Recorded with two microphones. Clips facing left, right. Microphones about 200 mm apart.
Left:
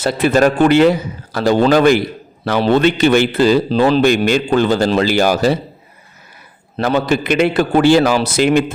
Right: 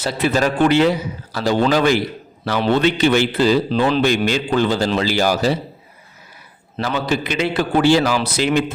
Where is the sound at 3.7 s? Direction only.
35° left (ahead or behind); by 5.6 s 55° left (ahead or behind).